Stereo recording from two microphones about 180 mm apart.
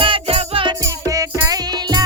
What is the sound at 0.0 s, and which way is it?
Music, 30° right (ahead or behind).